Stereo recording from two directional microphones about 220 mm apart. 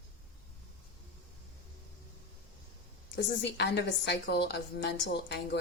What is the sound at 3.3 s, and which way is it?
A woman's voice, 50° left (ahead or behind).